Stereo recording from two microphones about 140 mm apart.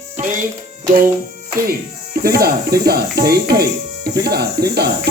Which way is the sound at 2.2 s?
90° right.